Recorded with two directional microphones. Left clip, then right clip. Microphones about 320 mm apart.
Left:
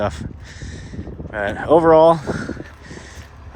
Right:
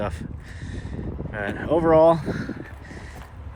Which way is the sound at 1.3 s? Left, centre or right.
Centre.